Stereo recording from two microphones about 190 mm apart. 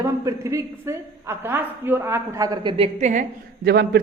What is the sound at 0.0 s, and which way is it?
A woman's voice, 15° right (ahead or behind).